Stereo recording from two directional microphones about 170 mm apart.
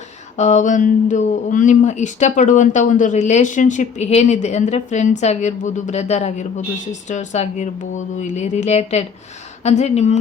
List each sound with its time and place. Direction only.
0.3 s speech: 45° left (ahead or behind)